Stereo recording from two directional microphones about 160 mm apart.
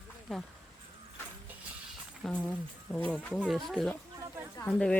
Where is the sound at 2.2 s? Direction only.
5° left (ahead or behind).